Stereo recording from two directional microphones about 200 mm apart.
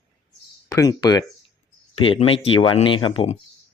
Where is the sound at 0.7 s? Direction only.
20° left (ahead or behind).